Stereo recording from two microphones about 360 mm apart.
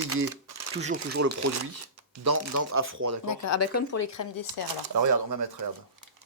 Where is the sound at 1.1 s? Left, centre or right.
Right.